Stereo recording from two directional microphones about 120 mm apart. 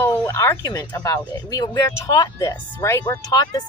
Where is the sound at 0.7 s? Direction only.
30° left (ahead or behind).